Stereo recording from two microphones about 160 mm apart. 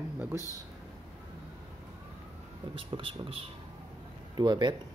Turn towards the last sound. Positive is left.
turn(degrees=-30)  # may be behind; listen again after turning